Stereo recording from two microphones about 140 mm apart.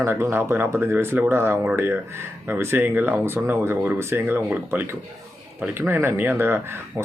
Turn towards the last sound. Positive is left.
turn(degrees=-15)  # may be behind; listen again after turning